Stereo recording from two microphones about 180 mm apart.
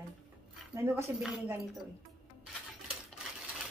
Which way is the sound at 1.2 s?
5° right (ahead or behind).